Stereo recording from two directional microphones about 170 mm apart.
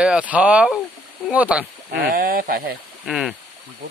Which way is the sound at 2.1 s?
55° right (ahead or behind).